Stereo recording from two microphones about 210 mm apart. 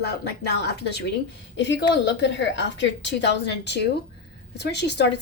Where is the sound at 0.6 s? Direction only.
55° left (ahead or behind).